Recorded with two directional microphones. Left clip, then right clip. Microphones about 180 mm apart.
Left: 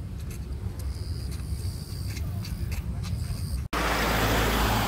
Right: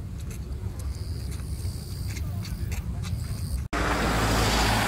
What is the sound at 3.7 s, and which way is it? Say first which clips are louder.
Vehicle: even; 50° right (ahead or behind).